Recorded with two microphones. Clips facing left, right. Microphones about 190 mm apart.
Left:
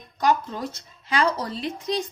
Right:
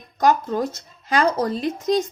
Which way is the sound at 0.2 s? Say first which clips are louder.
Right 4 dB; 45° right (ahead or behind).